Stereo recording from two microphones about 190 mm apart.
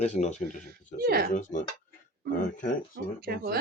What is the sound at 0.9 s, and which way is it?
Speech, 55° right (ahead or behind).